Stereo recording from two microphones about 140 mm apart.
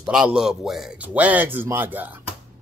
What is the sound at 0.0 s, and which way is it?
A man's voice, 5° right (ahead or behind).